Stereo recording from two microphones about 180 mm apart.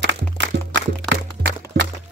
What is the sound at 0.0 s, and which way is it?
Music, 80° right.